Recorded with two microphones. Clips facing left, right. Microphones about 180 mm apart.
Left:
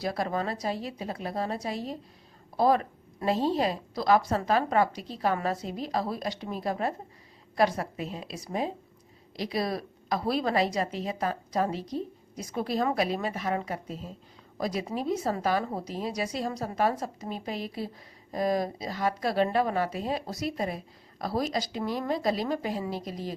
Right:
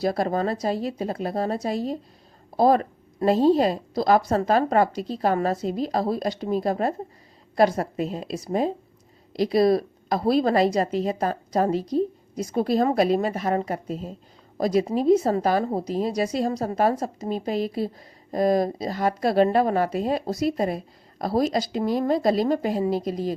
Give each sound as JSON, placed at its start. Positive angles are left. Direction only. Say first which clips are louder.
{"t": 0.0, "sound": "speech", "louder": "right 6 dB", "side_deg": -40}